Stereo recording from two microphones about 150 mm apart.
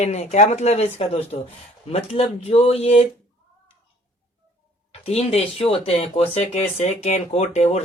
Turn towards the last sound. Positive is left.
turn(degrees=45)  # may be behind; listen again after turning